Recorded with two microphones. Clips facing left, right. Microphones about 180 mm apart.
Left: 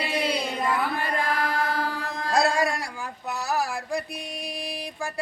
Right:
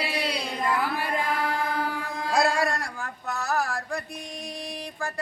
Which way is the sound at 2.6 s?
10° left (ahead or behind).